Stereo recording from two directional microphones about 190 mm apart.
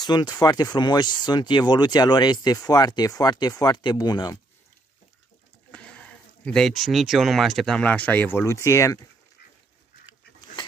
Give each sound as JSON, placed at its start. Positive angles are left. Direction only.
{"t": 0.0, "sound": "speech", "side_deg": 20}
{"t": 5.7, "sound": "speech", "side_deg": 5}